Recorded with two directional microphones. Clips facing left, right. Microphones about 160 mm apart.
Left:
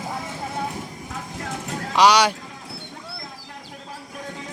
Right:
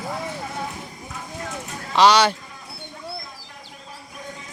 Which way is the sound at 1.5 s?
65° left (ahead or behind).